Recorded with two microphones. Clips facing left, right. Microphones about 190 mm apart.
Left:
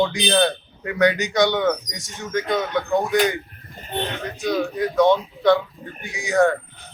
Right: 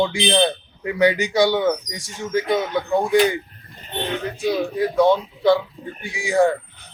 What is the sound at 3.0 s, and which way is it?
Speech, 30° right (ahead or behind).